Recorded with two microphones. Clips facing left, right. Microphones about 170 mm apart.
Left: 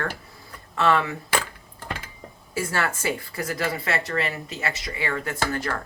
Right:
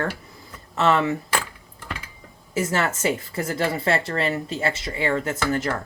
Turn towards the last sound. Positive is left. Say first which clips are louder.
# right 3 dB
turn(degrees=-20)  # may be behind; listen again after turning